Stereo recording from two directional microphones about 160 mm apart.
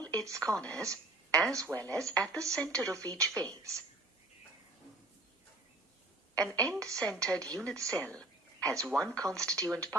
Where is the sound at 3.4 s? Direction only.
20° right (ahead or behind).